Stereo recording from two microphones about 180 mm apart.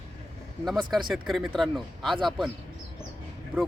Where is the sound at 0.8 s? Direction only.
25° right (ahead or behind).